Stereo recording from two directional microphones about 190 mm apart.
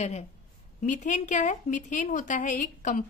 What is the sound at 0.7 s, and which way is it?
A woman's voice, 40° left (ahead or behind).